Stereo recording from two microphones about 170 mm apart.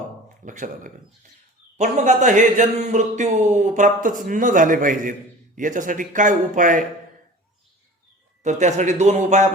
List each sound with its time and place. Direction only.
0.4 s speech: 50° right (ahead or behind)
8.4 s speech: 45° right (ahead or behind)